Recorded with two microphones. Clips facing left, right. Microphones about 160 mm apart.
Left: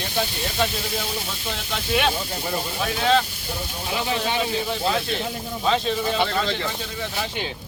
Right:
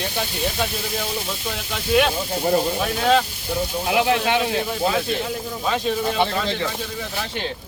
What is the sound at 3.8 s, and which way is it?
Speech, 70° right (ahead or behind).